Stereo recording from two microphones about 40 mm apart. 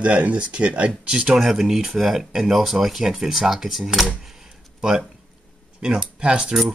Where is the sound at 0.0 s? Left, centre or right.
Right; by 4.1 s centre.